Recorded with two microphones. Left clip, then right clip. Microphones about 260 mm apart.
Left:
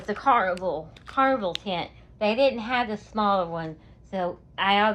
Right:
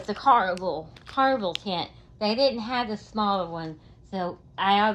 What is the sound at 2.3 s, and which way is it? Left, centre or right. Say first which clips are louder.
Speech: left 1 dB; centre.